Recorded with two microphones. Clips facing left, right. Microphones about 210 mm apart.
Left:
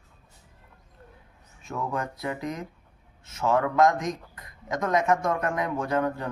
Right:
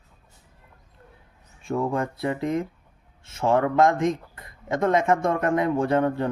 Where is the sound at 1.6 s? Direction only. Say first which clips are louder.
Right 6 dB; 30° right (ahead or behind).